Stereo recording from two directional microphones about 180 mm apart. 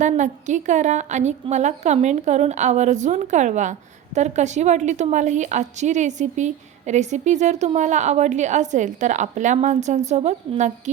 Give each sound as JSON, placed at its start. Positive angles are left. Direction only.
{"t": 0.0, "sound": "a woman's voice", "side_deg": -40}